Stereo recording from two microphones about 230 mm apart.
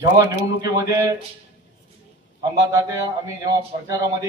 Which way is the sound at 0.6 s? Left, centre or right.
Centre.